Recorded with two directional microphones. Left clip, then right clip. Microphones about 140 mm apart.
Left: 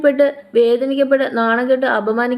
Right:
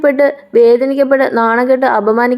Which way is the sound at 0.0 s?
40° right (ahead or behind).